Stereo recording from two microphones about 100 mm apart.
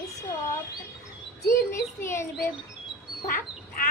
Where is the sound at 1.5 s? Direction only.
30° left (ahead or behind).